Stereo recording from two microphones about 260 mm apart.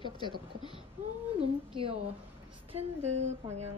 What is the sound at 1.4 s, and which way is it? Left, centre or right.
Speech, right.